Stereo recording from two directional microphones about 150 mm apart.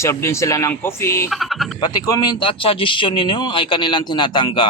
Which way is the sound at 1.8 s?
25° left (ahead or behind).